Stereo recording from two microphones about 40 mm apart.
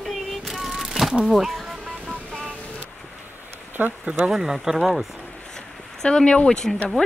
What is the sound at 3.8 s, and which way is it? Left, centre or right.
Speech, right.